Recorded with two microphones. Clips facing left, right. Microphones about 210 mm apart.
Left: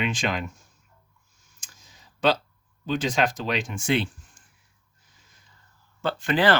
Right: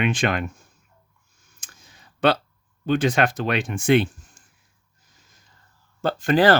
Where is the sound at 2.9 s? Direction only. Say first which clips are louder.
Right 4 dB; 60° right (ahead or behind).